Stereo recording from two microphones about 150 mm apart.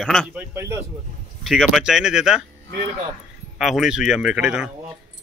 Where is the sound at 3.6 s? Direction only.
Centre (ahead or behind).